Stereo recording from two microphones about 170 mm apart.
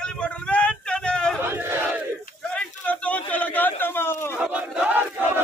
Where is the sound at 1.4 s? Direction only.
15° right (ahead or behind).